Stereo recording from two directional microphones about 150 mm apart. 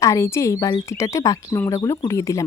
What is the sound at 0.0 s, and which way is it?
Speech, 20° left (ahead or behind).